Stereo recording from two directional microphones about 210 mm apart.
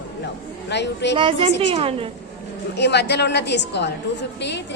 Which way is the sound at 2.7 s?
55° left (ahead or behind).